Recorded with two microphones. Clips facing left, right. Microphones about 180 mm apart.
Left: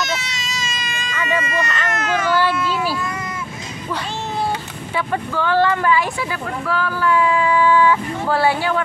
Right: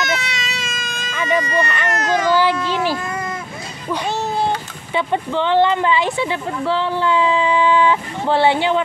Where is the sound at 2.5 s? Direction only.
50° right (ahead or behind).